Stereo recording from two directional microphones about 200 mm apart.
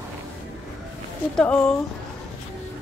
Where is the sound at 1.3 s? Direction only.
5° left (ahead or behind).